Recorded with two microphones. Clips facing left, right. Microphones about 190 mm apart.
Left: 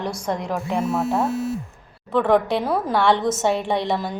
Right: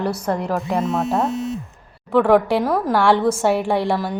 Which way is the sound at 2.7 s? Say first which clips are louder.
Right 3 dB; 5° left (ahead or behind).